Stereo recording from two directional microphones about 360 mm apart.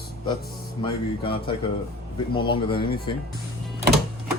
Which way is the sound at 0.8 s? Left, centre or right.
Centre.